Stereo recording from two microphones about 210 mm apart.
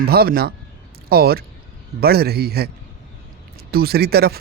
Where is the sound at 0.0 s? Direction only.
45° right (ahead or behind).